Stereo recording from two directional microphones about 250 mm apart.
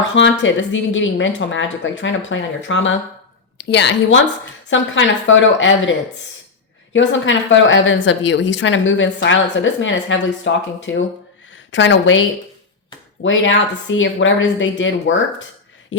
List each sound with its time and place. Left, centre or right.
0.1 s a woman's voice: left
6.9 s a woman's voice: left
13.2 s a woman's voice: left